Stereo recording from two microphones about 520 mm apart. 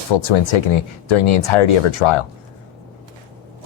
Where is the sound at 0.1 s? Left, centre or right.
Left.